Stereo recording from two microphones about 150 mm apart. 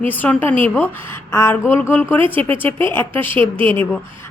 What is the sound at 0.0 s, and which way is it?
Speech, 10° left (ahead or behind).